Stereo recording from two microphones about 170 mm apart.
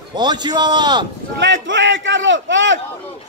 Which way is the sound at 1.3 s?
90° right.